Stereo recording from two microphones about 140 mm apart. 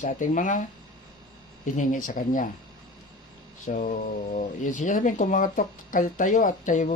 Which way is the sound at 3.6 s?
65° left (ahead or behind).